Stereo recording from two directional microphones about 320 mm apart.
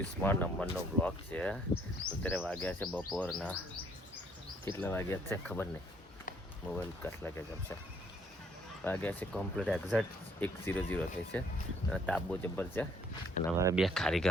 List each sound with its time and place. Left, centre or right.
0.2 s speech: centre
4.8 s speech: centre
6.7 s speech: centre
8.8 s speech: centre
13.6 s speech: centre